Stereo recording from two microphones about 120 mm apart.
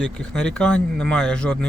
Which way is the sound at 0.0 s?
5° left (ahead or behind).